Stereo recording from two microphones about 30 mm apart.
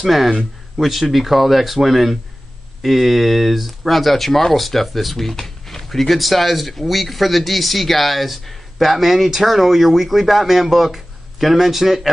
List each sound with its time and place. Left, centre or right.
0.0 s speech: centre